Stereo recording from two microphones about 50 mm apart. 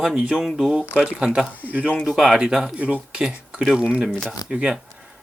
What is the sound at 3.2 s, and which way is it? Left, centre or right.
Speech, centre.